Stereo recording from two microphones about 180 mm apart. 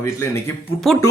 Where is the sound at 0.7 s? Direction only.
Centre (ahead or behind).